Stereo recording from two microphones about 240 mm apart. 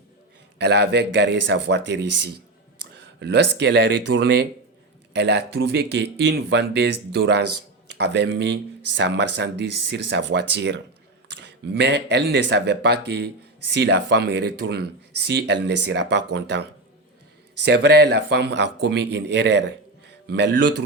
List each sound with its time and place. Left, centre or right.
0.6 s speech: right
3.2 s speech: right
11.3 s speech: right
17.7 s speech: right
20.6 s a man's voice: right